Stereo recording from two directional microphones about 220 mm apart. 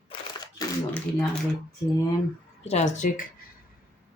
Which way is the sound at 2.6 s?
30° left (ahead or behind).